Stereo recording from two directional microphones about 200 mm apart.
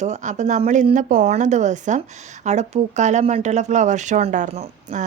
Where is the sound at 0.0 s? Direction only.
35° right (ahead or behind).